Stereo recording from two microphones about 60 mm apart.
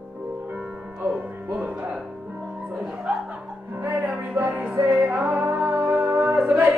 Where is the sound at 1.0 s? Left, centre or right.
Right.